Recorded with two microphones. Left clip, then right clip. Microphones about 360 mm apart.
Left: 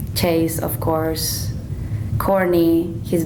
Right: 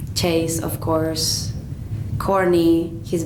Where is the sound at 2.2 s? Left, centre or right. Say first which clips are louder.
Left 1 dB; left.